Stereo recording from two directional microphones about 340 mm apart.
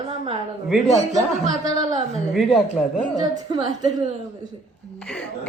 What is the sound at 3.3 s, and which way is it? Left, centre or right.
Speech, centre.